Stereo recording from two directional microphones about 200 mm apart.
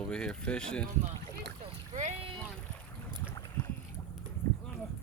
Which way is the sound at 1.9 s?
30° right (ahead or behind).